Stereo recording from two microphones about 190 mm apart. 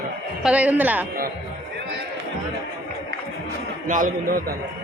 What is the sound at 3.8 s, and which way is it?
Speech, 45° right (ahead or behind).